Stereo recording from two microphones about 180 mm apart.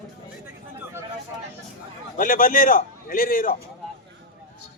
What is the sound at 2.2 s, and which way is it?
A man's voice, 50° left (ahead or behind).